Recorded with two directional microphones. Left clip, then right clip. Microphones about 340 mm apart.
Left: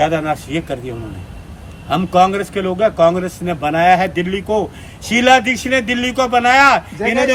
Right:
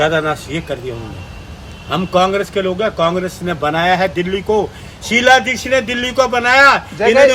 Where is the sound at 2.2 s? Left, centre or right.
Centre.